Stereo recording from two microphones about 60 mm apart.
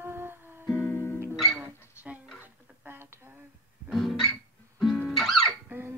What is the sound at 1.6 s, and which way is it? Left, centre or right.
Dog, right.